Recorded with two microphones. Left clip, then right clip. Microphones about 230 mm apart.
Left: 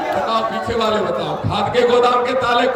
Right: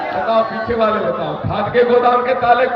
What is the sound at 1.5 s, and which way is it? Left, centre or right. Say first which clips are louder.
Speech: right 1 dB; left.